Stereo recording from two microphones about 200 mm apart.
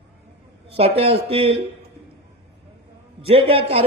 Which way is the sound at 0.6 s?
30° right (ahead or behind).